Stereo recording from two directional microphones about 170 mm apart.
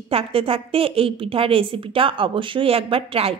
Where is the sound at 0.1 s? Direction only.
35° right (ahead or behind).